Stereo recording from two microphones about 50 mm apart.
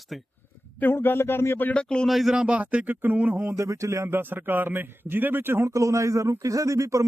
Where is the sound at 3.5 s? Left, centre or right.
Right.